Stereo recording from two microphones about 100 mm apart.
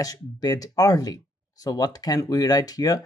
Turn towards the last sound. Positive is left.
turn(degrees=40)  # may be behind; listen again after turning